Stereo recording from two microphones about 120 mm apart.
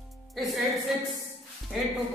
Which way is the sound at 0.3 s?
Centre (ahead or behind).